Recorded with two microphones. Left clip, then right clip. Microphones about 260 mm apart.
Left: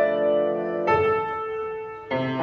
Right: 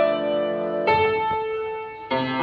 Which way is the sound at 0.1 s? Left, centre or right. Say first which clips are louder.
Left 1 dB; right.